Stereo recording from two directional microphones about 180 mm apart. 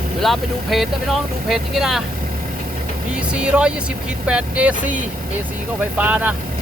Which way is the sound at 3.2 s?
5° right (ahead or behind).